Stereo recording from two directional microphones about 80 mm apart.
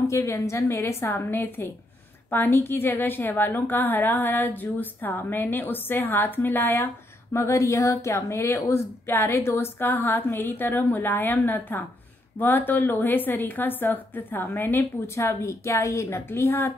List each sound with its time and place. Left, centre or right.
0.0 s a woman's voice: left